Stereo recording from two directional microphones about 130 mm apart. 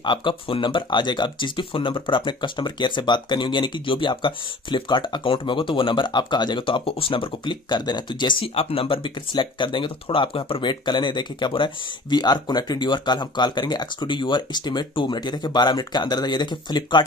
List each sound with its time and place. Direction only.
0.0 s speech: 40° left (ahead or behind)